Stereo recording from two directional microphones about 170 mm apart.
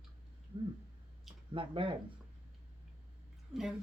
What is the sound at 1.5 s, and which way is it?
Speech, 30° right (ahead or behind).